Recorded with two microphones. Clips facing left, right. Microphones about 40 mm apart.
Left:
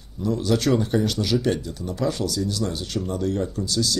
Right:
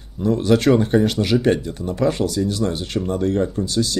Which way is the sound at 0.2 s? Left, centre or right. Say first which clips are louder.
Right 6 dB; right.